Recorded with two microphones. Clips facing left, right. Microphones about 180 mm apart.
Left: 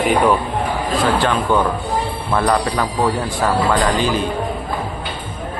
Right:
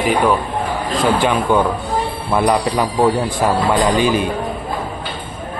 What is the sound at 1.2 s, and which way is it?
A man's voice, 10° right (ahead or behind).